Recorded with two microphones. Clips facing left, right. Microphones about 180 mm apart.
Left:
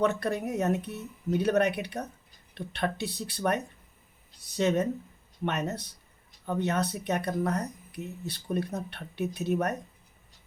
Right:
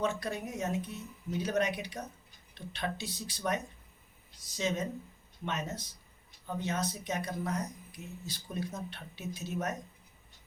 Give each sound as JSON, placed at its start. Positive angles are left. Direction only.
{"t": 0.0, "sound": "speech", "side_deg": 60}